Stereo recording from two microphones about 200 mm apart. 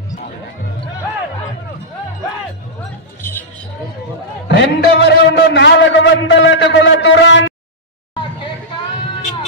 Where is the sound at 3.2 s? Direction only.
10° left (ahead or behind).